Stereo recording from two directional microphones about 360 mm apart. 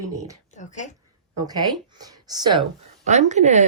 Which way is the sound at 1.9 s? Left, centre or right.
Centre.